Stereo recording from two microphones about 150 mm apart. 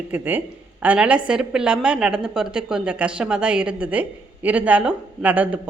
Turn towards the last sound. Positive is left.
turn(degrees=-10)  # may be behind; listen again after turning